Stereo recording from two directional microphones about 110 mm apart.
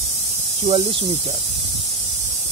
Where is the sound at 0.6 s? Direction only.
80° right.